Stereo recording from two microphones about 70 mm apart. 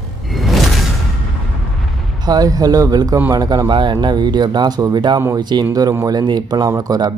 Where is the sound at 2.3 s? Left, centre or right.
Right.